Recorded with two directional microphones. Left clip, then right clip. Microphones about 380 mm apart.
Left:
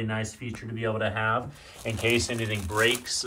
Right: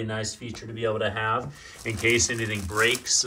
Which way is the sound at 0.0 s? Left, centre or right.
Centre.